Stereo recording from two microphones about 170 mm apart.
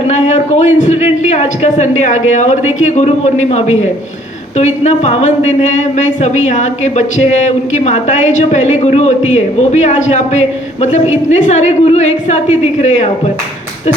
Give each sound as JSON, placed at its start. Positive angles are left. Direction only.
{"t": 0.1, "sound": "speech", "side_deg": 40}